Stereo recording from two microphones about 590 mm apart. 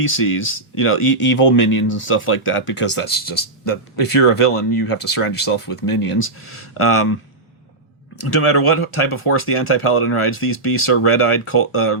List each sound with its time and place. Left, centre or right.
0.0 s speech: left
8.2 s speech: left